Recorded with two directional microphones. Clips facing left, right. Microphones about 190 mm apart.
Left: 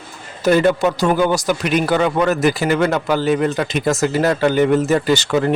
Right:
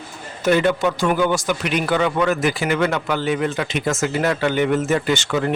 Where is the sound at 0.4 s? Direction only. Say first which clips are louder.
Left 3 dB; 40° left (ahead or behind).